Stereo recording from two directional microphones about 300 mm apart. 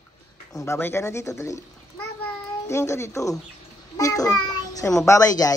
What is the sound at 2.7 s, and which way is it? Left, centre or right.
A woman's voice, centre.